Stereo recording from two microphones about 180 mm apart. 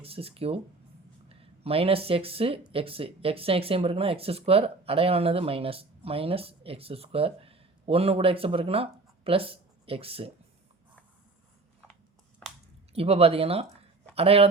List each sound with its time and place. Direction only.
0.0 s speech: 30° right (ahead or behind)
12.9 s speech: 35° right (ahead or behind)